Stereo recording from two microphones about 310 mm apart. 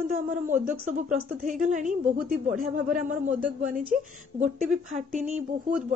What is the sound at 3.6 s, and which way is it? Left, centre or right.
Speech, right.